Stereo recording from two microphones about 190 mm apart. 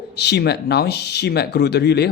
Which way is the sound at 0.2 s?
60° left (ahead or behind).